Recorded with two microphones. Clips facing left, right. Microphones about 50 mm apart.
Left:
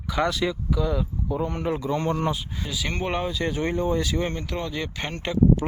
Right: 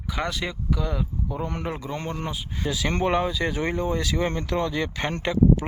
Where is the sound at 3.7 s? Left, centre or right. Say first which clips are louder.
Left 1 dB; right.